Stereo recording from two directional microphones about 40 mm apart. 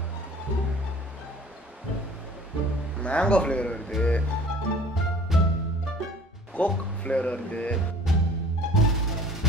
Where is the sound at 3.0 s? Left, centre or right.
Left.